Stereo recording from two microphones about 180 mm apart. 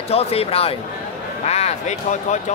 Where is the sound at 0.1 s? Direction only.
35° left (ahead or behind).